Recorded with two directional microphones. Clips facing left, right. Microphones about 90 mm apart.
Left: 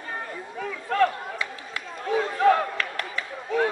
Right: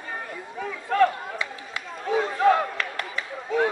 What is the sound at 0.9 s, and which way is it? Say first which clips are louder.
Run: right 2 dB; 25° right (ahead or behind).